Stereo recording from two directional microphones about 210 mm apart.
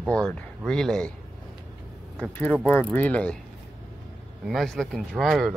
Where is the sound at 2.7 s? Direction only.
10° left (ahead or behind).